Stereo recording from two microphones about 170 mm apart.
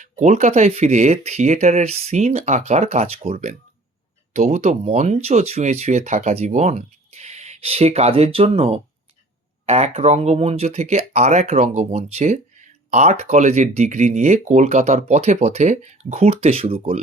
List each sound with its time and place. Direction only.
0.0 s speech: 45° right (ahead or behind)